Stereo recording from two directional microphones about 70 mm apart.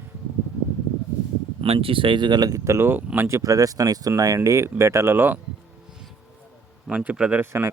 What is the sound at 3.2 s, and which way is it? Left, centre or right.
Speech, right.